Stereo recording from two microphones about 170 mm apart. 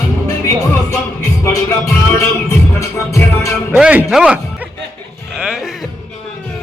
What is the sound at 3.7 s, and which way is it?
Music, 10° right (ahead or behind).